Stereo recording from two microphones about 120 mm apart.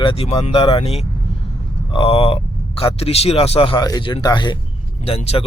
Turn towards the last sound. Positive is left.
turn(degrees=60)  # may be behind; listen again after turning